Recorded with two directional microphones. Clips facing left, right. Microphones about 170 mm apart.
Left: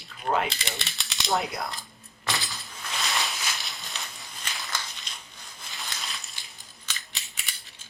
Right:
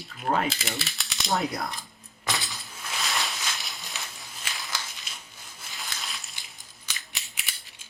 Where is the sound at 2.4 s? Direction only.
Centre (ahead or behind).